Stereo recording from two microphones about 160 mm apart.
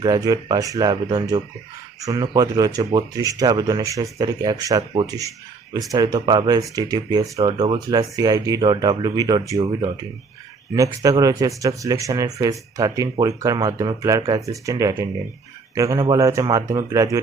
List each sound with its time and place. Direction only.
0.0 s speech: 25° right (ahead or behind)
11.2 s speech: 20° right (ahead or behind)